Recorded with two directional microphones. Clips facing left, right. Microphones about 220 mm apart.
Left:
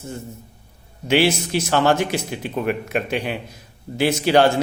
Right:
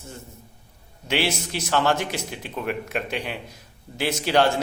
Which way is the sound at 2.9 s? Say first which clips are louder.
Left 5 dB; 50° left (ahead or behind).